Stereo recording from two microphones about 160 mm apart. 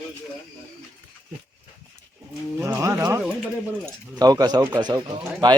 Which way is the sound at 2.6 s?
15° right (ahead or behind).